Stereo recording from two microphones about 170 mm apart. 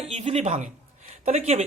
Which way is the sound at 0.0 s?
35° right (ahead or behind).